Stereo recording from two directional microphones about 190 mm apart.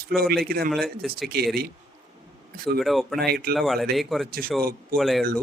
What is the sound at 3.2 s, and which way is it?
Speech, 55° right (ahead or behind).